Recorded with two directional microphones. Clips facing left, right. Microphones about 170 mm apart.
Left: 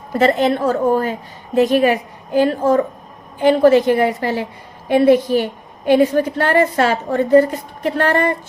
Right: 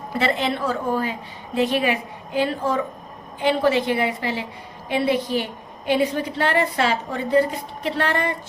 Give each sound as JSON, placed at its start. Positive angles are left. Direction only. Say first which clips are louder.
{"t": 0.1, "sound": "a woman's voice", "louder": "left 8 dB", "side_deg": 45}